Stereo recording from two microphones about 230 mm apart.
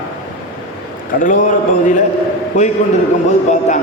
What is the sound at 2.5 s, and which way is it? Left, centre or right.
Music, left.